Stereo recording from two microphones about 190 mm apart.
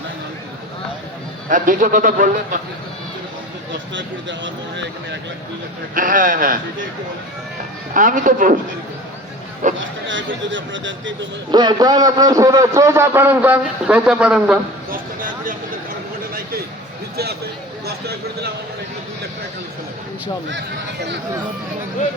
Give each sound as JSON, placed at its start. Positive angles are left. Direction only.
{"t": 1.5, "sound": "a man's voice", "side_deg": -45}
{"t": 3.9, "sound": "speech", "side_deg": -75}
{"t": 5.9, "sound": "a man's voice", "side_deg": -45}
{"t": 7.9, "sound": "a man's voice", "side_deg": -45}
{"t": 9.7, "sound": "speech", "side_deg": -80}
{"t": 11.5, "sound": "a man's voice", "side_deg": -20}
{"t": 14.8, "sound": "a sound", "side_deg": -45}